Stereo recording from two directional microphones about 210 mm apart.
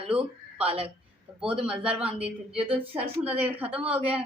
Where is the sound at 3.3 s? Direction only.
10° right (ahead or behind).